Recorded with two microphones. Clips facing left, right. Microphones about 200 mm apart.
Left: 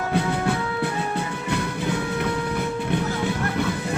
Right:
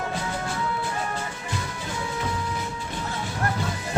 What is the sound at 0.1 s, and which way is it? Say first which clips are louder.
Music: left 7 dB; 60° left (ahead or behind).